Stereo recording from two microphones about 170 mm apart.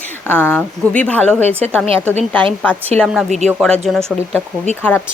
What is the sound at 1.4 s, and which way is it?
Speech, 40° right (ahead or behind).